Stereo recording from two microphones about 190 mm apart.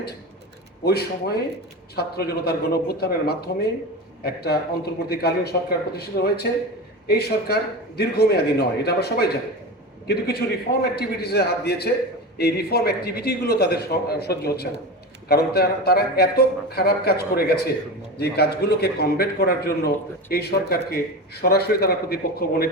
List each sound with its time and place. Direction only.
0.9 s a man's voice: 55° left (ahead or behind)